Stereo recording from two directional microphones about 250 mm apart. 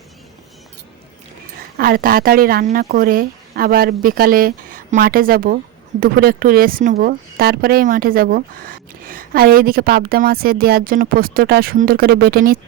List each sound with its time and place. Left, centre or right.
1.8 s speech: right